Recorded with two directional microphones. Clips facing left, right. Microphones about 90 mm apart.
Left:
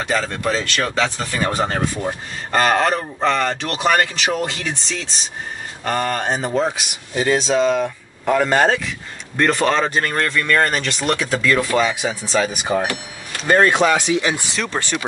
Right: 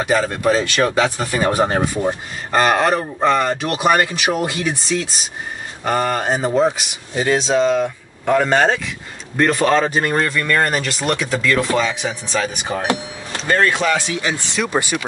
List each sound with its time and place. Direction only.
0.0 s speech: 10° right (ahead or behind); by 12.8 s 10° left (ahead or behind)
13.5 s speech: 25° left (ahead or behind)
14.5 s speech: 10° right (ahead or behind)